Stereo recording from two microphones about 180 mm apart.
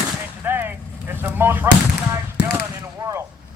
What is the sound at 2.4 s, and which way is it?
Basketball bounce, 70° left (ahead or behind).